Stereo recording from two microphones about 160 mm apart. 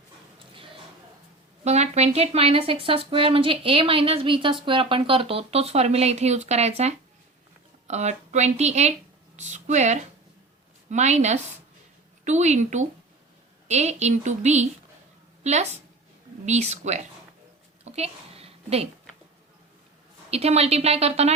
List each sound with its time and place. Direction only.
1.6 s a woman's voice: 45° right (ahead or behind)
17.8 s a sound: 40° right (ahead or behind)
20.3 s a woman's voice: 40° right (ahead or behind)